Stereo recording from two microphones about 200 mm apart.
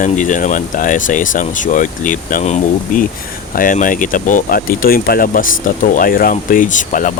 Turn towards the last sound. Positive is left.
turn(degrees=40)  # may be behind; listen again after turning